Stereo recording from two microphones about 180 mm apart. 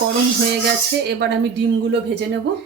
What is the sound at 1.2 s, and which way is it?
Speech, 70° right (ahead or behind).